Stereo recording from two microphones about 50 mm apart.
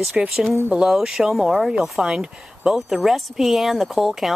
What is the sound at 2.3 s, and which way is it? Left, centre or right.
Speech, centre.